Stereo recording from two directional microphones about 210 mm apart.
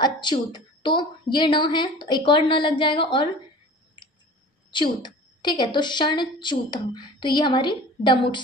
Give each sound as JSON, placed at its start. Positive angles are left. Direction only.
{"t": 0.0, "sound": "a woman's voice", "side_deg": 20}
{"t": 4.6, "sound": "a woman's voice", "side_deg": 20}